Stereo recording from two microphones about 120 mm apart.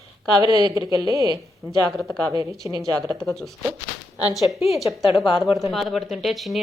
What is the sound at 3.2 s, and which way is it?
A woman's voice, centre (ahead or behind).